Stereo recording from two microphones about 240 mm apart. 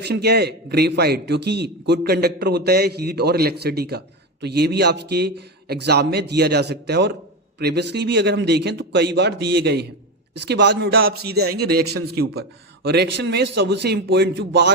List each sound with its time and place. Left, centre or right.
0.0 s a man's voice: right